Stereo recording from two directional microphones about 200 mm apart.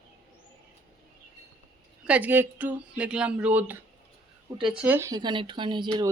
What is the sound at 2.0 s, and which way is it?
Speech, 5° right (ahead or behind).